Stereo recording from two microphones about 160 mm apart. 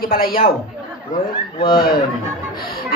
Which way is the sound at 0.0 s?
65° left (ahead or behind).